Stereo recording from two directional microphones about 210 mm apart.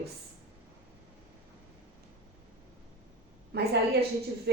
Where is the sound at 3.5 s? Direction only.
50° right (ahead or behind).